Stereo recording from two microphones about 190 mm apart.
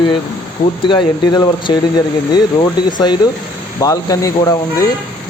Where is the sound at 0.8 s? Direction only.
25° left (ahead or behind).